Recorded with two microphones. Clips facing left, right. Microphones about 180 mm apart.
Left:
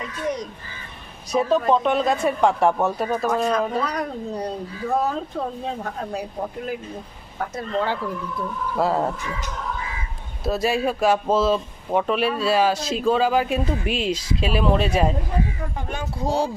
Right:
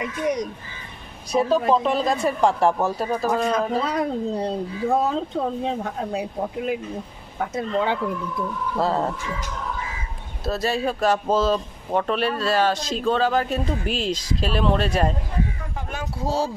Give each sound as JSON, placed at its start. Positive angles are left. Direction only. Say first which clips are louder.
{"t": 0.0, "sound": "speech", "louder": "right 3 dB", "side_deg": -15}
{"t": 1.7, "sound": "speech", "louder": "left 1 dB", "side_deg": 0}
{"t": 3.5, "sound": "speech", "louder": "right 1 dB", "side_deg": -25}
{"t": 8.7, "sound": "speech", "louder": "left 1 dB", "side_deg": 5}
{"t": 10.4, "sound": "speech", "louder": "left 2 dB", "side_deg": 5}